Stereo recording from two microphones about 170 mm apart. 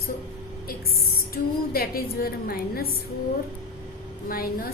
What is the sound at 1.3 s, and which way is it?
A woman's voice, 60° left (ahead or behind).